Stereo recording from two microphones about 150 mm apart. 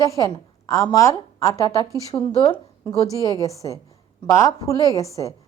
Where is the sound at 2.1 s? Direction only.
40° left (ahead or behind).